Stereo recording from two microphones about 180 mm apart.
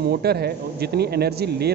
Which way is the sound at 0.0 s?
60° right (ahead or behind).